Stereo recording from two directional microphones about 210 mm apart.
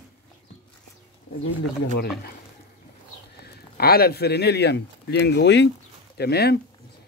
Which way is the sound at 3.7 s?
45° left (ahead or behind).